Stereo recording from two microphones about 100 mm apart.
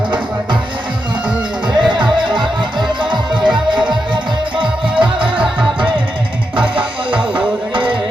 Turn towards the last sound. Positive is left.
turn(degrees=-55)  # may be behind; listen again after turning